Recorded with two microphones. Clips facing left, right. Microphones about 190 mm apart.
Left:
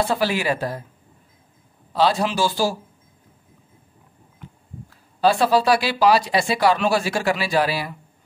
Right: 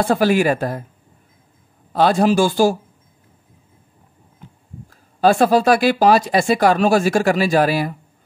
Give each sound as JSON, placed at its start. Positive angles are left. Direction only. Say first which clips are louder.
{"t": 0.0, "sound": "speech", "louder": "right 6 dB", "side_deg": -50}
{"t": 1.9, "sound": "speech", "louder": "right 5 dB", "side_deg": -50}
{"t": 4.8, "sound": "speech", "louder": "right 4 dB", "side_deg": -50}